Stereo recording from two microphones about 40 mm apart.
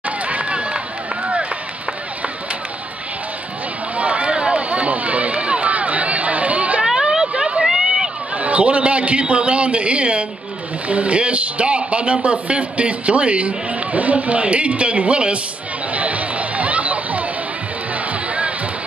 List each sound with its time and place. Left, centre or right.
0.2 s run: right
3.9 s run: right
6.8 s a sound: centre
7.6 s run: centre
8.4 s a sound: right
10.9 s a man's voice: right
15.9 s music: right